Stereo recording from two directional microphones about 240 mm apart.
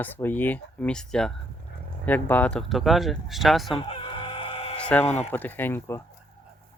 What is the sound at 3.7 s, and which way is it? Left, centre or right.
Chicken, left.